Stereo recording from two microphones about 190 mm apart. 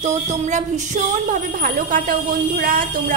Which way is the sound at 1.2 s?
45° right (ahead or behind).